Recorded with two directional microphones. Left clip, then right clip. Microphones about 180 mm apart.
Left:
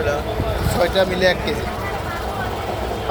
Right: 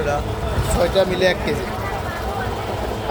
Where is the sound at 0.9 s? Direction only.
20° right (ahead or behind).